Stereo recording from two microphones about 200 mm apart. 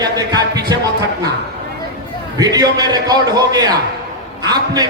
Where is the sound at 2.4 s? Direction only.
20° right (ahead or behind).